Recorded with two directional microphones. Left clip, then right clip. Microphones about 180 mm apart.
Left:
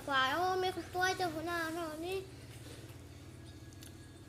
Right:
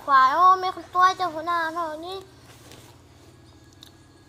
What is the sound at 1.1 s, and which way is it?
Speech, 5° right (ahead or behind).